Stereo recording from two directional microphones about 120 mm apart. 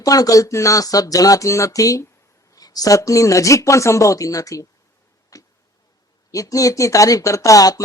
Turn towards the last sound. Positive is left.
turn(degrees=30)  # may be behind; listen again after turning